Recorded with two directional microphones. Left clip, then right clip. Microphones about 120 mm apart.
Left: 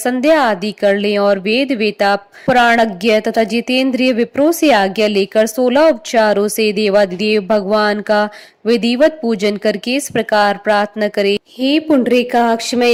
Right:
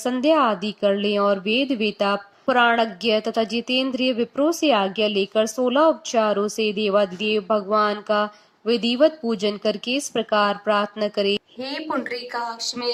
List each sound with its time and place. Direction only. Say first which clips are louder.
0.0 s speech: left 6 dB; 35° left (ahead or behind)
11.9 s speech: left 13 dB; 20° left (ahead or behind)